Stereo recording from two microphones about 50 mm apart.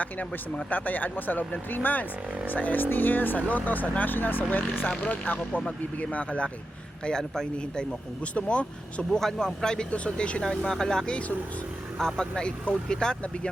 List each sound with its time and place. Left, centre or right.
0.0 s speech: left
7.0 s speech: centre
8.2 s speech: left
9.1 s speech: centre
9.9 s speech: left
10.4 s speech: centre